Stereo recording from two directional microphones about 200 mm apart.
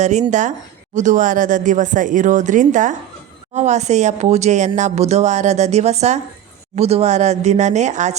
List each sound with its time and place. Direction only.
0.0 s speech: 35° right (ahead or behind)